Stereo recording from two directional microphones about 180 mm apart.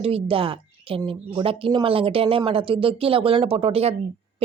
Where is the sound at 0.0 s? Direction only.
30° right (ahead or behind).